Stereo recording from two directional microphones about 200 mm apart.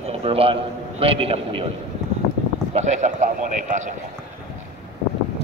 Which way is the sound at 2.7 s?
35° right (ahead or behind).